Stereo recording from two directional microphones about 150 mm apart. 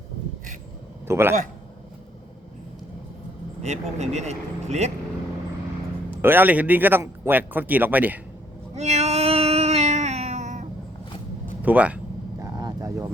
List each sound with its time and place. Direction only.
1.0 s speech: 15° right (ahead or behind)
3.6 s speech: 45° right (ahead or behind)
6.1 s speech: 15° right (ahead or behind)
8.7 s a sound: 45° right (ahead or behind)
11.6 s speech: 10° right (ahead or behind)
12.4 s vehicle: 25° right (ahead or behind)